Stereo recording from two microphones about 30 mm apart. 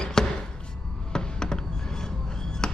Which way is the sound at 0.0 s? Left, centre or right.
Left.